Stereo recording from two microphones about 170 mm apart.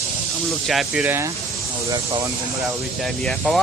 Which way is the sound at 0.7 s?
Centre (ahead or behind).